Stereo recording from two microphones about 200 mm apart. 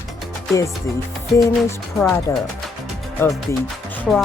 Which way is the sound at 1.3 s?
15° left (ahead or behind).